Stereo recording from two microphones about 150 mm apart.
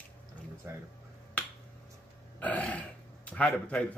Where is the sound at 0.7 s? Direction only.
15° right (ahead or behind).